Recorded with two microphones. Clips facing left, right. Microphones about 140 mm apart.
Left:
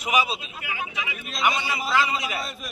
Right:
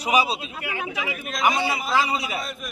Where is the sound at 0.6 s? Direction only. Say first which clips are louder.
Right 3 dB; 60° right (ahead or behind).